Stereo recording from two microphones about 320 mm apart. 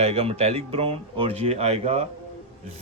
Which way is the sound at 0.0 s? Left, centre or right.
Centre.